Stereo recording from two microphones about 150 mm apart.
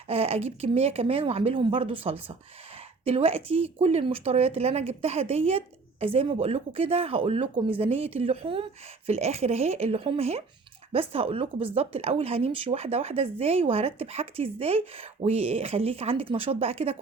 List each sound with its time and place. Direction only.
0.1 s speech: 40° right (ahead or behind)